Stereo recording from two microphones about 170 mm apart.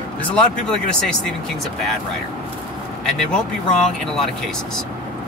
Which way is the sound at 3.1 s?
5° left (ahead or behind).